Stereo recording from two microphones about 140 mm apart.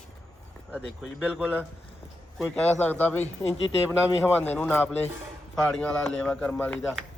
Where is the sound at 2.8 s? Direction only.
15° left (ahead or behind).